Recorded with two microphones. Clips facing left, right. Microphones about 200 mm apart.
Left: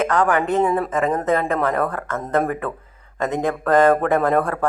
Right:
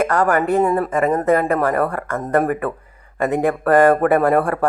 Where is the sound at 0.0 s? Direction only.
10° right (ahead or behind).